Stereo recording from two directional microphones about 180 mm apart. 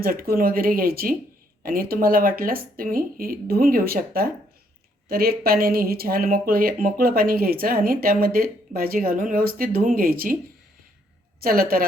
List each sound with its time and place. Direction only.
0.0 s speech: 55° right (ahead or behind)
11.4 s speech: 55° right (ahead or behind)